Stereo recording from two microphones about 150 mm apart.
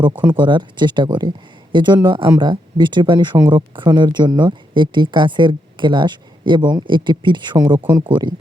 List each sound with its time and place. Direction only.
0.3 s speech: 30° right (ahead or behind)
7.8 s speech: 20° right (ahead or behind)
8.0 s speech: 35° right (ahead or behind)